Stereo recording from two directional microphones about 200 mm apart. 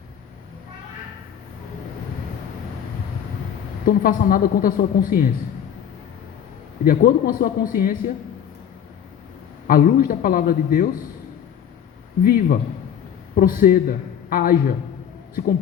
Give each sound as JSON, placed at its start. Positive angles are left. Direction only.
{"t": 3.8, "sound": "a woman's voice", "side_deg": 45}
{"t": 6.8, "sound": "a woman's voice", "side_deg": 45}
{"t": 9.6, "sound": "a woman's voice", "side_deg": 45}
{"t": 12.2, "sound": "a woman's voice", "side_deg": 50}